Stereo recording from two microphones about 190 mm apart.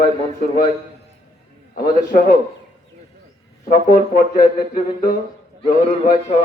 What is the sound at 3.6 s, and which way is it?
Speech, 50° left (ahead or behind).